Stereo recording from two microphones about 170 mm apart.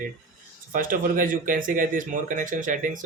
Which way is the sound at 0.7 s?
55° right (ahead or behind).